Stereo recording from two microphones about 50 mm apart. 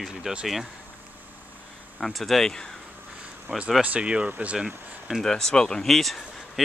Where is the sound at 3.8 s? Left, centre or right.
Right.